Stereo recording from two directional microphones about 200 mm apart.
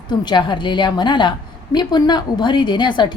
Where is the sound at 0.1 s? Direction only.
20° left (ahead or behind).